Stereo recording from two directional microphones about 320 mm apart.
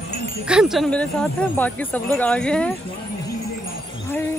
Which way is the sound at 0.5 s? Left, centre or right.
Centre.